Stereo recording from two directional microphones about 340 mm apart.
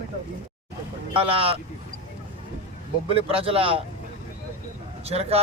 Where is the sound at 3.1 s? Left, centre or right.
Centre.